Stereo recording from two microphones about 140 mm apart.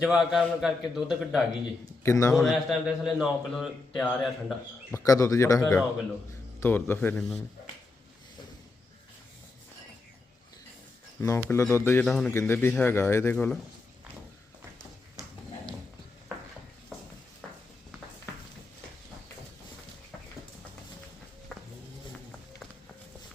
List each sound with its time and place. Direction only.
0.0 s a man's voice: 5° right (ahead or behind)
2.0 s speech: 20° left (ahead or behind)
2.3 s a man's voice: centre (ahead or behind)
4.9 s speech: 25° left (ahead or behind)
11.4 s speech: 20° left (ahead or behind)
11.9 s a man's voice: 5° left (ahead or behind)
12.3 s speech: 15° left (ahead or behind)
21.5 s music: centre (ahead or behind)